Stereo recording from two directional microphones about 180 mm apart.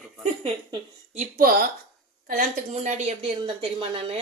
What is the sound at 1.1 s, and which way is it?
A child's voice, 45° right (ahead or behind).